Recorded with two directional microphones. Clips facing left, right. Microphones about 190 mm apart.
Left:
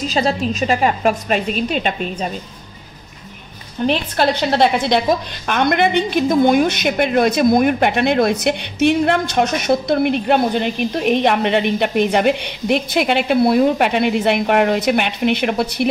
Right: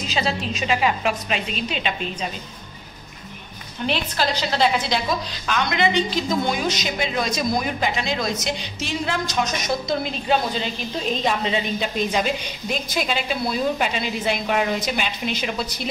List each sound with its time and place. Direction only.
0.0 s a woman's voice: 40° left (ahead or behind)
3.8 s a woman's voice: 40° left (ahead or behind)
4.2 s a woman's voice: 55° left (ahead or behind)